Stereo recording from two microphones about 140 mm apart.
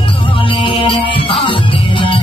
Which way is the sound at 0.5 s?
40° left (ahead or behind).